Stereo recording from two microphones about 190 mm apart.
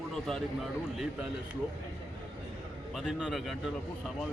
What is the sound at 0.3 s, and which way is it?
Speech, centre (ahead or behind).